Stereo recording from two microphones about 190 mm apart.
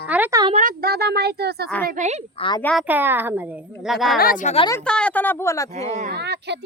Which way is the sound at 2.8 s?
10° right (ahead or behind).